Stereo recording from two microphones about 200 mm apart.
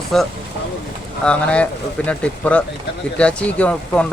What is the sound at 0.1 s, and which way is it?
Speech, centre (ahead or behind).